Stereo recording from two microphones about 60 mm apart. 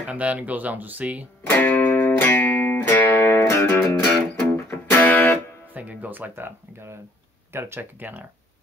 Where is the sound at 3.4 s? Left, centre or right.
Left.